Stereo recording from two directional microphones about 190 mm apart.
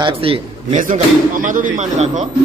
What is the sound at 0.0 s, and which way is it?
Speech, 30° right (ahead or behind).